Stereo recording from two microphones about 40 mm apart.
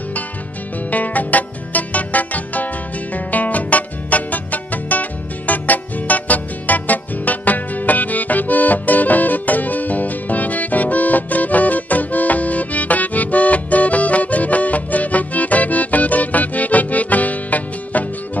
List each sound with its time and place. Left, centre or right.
0.8 s music: left